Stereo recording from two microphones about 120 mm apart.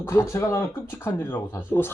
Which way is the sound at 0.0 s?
20° left (ahead or behind).